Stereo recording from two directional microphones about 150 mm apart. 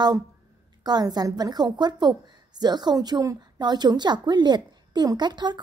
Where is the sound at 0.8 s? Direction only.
25° right (ahead or behind).